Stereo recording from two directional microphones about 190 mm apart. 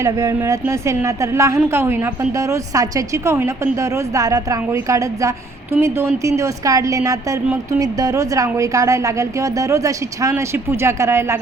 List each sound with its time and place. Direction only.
0.0 s a woman's voice: 15° right (ahead or behind)